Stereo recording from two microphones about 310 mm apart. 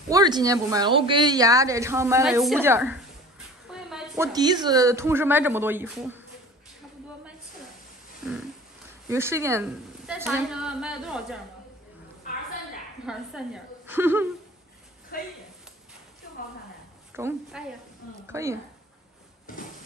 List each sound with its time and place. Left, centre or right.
0.1 s a woman's voice: centre
9.1 s a woman's voice: centre
13.0 s a woman's voice: centre
15.1 s speech: left
17.1 s a woman's voice: centre
19.5 s slam: left